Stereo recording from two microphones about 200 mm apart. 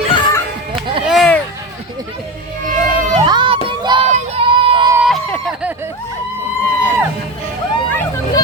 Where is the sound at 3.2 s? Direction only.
25° right (ahead or behind).